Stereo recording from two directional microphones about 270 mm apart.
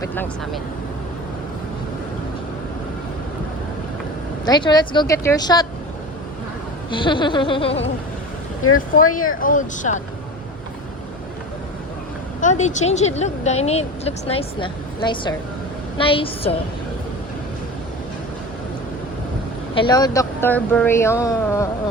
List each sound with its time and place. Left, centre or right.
0.1 s speech: centre
4.4 s speech: centre
6.9 s speech: centre
8.6 s speech: left
9.1 s speech: left
12.4 s speech: left
19.7 s speech: centre